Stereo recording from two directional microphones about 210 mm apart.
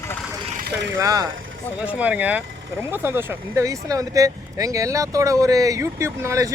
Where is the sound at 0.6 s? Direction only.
55° right (ahead or behind).